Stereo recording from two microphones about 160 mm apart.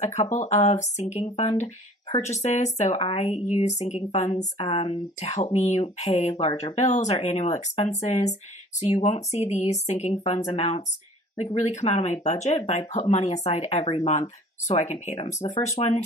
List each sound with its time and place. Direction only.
0.0 s speech: 45° left (ahead or behind)
4.6 s speech: 35° left (ahead or behind)
15.1 s speech: 25° left (ahead or behind)
15.6 s speech: 45° left (ahead or behind)